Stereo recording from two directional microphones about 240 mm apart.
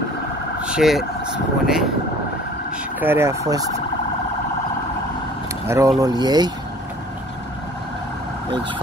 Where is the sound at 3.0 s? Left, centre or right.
Centre.